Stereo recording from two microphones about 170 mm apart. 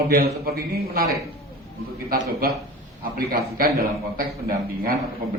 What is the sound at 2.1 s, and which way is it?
A man's voice, 60° right (ahead or behind).